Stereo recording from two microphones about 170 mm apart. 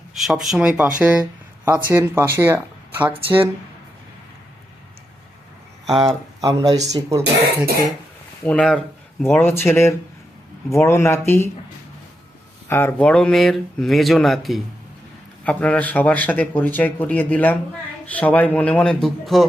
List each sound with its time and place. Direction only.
0.1 s speech: centre (ahead or behind)
1.2 s speech: 20° right (ahead or behind)
6.4 s speech: 25° right (ahead or behind)
8.4 s speech: 5° left (ahead or behind)
12.6 s speech: 10° left (ahead or behind)